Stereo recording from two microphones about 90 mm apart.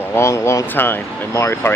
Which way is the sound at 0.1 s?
30° left (ahead or behind).